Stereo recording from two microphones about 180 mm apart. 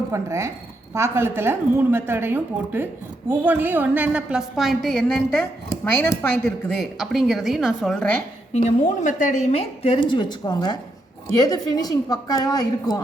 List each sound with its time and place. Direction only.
0.1 s a woman's voice: 15° right (ahead or behind); by 8.2 s 5° left (ahead or behind)
8.5 s a woman's voice: 40° left (ahead or behind); by 13.0 s 20° left (ahead or behind)